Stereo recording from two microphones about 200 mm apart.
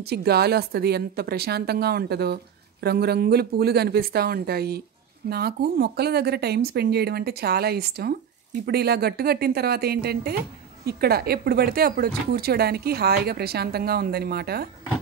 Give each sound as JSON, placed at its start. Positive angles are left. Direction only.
{"t": 0.1, "sound": "speech", "side_deg": -50}